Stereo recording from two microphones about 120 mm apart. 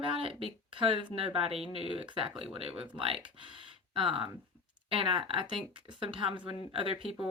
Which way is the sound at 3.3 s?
45° right (ahead or behind).